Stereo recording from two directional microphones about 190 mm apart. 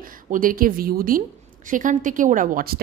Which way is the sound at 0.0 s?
45° right (ahead or behind).